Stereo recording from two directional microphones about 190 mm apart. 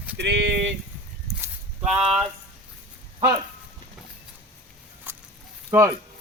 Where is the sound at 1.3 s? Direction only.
5° right (ahead or behind).